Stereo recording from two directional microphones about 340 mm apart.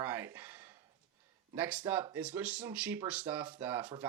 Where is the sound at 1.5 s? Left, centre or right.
Centre.